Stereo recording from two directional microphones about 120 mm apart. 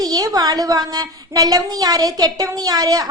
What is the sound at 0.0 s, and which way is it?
A woman's voice, 30° right (ahead or behind).